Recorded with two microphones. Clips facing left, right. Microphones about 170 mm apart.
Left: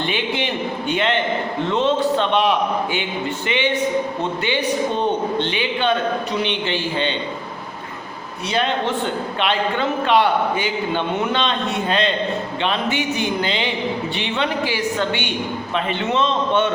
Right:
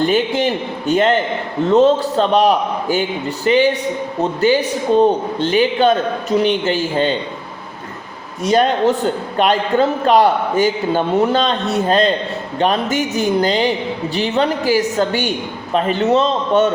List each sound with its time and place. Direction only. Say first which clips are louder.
0.0 s a man's voice: right 7 dB; 40° right (ahead or behind)
8.4 s a man's voice: right 7 dB; 45° right (ahead or behind)